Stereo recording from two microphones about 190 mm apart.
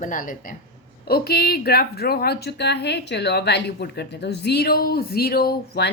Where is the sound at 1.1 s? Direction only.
55° left (ahead or behind).